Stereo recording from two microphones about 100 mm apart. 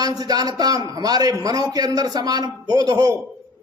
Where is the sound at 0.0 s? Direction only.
40° right (ahead or behind).